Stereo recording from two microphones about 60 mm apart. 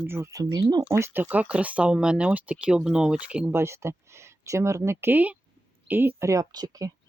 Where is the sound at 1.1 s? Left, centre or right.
Right.